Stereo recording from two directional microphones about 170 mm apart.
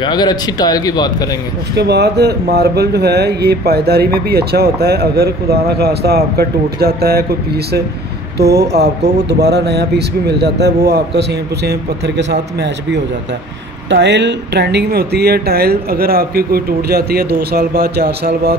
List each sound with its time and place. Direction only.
0.0 s speech: 25° left (ahead or behind)
1.8 s speech: 75° right (ahead or behind)